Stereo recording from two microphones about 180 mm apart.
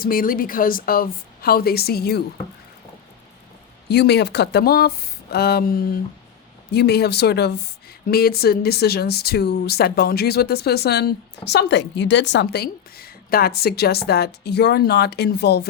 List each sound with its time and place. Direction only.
0.0 s a woman's voice: 50° left (ahead or behind)
3.8 s a woman's voice: 65° left (ahead or behind)